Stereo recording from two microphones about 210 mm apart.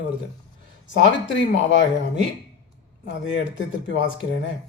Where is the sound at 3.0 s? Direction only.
60° left (ahead or behind).